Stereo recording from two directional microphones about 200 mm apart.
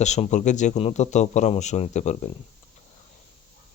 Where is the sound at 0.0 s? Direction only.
35° left (ahead or behind).